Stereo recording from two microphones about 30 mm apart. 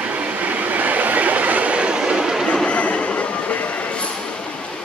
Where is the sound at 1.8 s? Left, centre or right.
Right.